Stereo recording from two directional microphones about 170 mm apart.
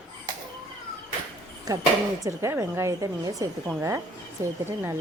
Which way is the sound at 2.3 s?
15° right (ahead or behind).